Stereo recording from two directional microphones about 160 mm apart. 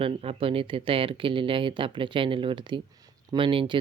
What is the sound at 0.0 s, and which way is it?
Speech, 35° right (ahead or behind).